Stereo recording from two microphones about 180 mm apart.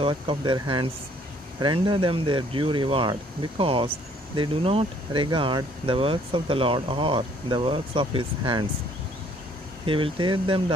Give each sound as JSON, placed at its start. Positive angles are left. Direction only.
{"t": 0.0, "sound": "speech", "side_deg": -30}
{"t": 9.8, "sound": "speech", "side_deg": -30}